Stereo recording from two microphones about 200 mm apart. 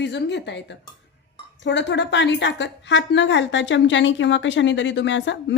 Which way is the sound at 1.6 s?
60° left (ahead or behind).